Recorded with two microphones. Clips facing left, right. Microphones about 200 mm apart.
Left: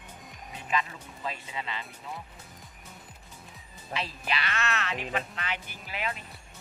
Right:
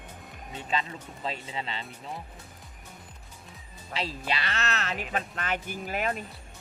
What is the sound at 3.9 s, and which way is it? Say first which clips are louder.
Speech: right 1 dB; 35° right (ahead or behind).